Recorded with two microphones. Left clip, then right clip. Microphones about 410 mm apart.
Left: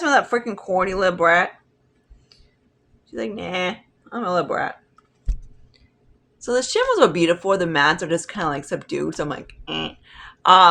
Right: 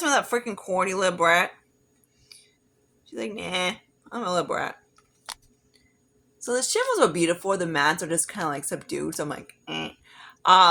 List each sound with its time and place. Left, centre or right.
0.0 s speech: right
2.3 s a sound: right
3.1 s speech: right
6.4 s speech: right